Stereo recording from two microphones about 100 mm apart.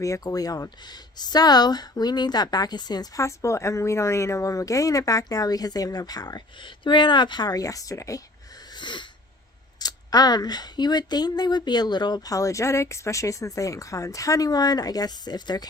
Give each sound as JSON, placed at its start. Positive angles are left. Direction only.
{"t": 0.0, "sound": "speech", "side_deg": 35}
{"t": 8.7, "sound": "sneeze", "side_deg": 50}
{"t": 9.7, "sound": "speech", "side_deg": 40}